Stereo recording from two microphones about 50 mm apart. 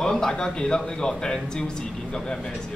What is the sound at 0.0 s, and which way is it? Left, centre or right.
A man's voice, centre.